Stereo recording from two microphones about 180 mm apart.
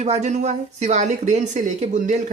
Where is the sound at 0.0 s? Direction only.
40° right (ahead or behind).